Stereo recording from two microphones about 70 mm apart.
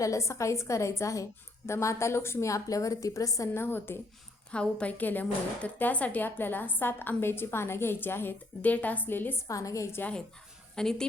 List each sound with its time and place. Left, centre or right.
0.0 s a woman's voice: left
3.5 s a woman's voice: left
4.5 s a woman's voice: centre
9.5 s a woman's voice: left
10.8 s speech: centre